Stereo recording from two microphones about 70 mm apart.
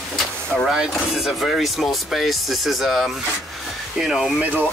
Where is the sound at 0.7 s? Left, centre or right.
Centre.